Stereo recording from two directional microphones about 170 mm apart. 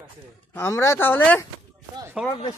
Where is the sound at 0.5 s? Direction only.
15° left (ahead or behind).